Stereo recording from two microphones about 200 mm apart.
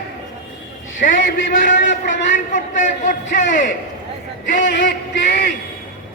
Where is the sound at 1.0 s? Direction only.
40° left (ahead or behind).